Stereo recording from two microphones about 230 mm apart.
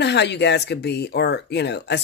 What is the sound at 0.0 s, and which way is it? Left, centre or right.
Speech, left.